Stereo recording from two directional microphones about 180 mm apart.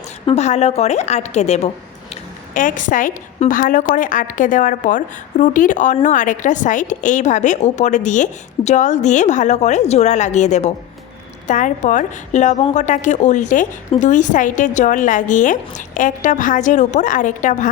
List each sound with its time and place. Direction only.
0.3 s a woman's voice: 40° left (ahead or behind)